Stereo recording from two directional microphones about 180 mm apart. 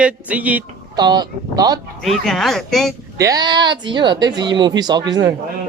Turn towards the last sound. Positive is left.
turn(degrees=-20)  # may be behind; listen again after turning